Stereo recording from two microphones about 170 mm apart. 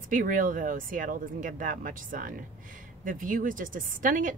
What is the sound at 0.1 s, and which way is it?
A woman's voice, 50° right (ahead or behind).